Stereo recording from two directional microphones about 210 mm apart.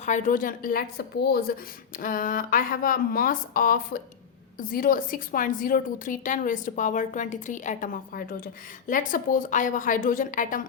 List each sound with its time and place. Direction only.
0.0 s a woman's voice: 35° left (ahead or behind)